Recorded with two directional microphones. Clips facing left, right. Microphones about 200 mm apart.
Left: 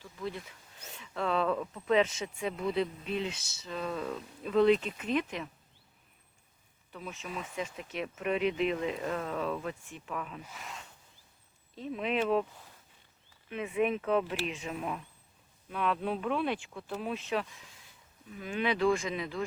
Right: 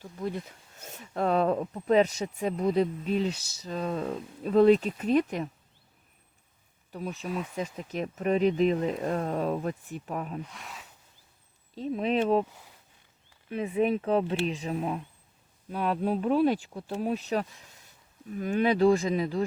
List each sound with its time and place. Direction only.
0.0 s speech: 45° right (ahead or behind)
6.9 s speech: 40° right (ahead or behind)
10.4 s speech: centre (ahead or behind)
11.7 s speech: 35° right (ahead or behind)
13.5 s speech: 35° right (ahead or behind)